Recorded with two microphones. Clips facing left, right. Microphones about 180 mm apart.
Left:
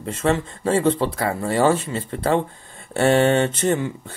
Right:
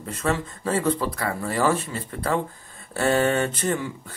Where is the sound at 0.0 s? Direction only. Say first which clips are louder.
Left 5 dB; 25° left (ahead or behind).